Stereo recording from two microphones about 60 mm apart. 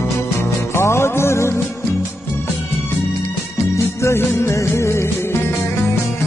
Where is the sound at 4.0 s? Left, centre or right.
Left.